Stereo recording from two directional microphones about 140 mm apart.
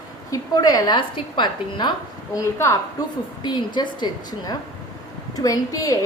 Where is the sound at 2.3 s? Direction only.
20° left (ahead or behind).